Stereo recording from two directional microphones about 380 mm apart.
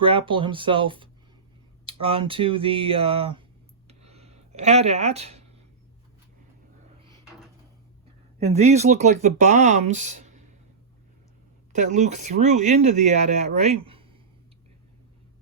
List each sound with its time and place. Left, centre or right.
0.0 s speech: centre
3.8 s a sound: centre
8.4 s speech: centre
11.7 s speech: centre